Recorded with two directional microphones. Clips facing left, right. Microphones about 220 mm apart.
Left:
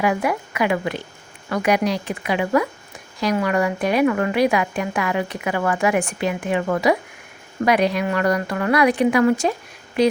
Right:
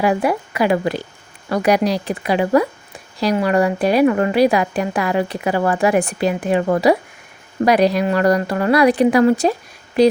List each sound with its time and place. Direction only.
0.0 s a woman's voice: 30° right (ahead or behind)